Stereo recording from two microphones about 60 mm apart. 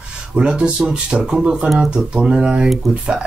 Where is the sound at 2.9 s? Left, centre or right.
Centre.